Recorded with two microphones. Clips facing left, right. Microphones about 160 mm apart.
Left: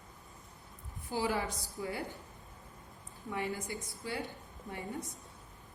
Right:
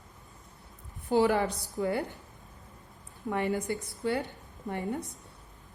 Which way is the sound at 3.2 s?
60° right (ahead or behind).